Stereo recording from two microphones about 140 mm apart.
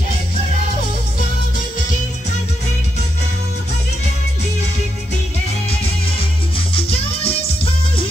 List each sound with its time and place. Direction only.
6.7 s music: 45° left (ahead or behind)